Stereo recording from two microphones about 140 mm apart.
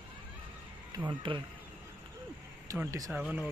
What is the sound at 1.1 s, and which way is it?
Speech, 35° right (ahead or behind).